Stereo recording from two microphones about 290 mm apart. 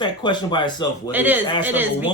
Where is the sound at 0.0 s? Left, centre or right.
Centre.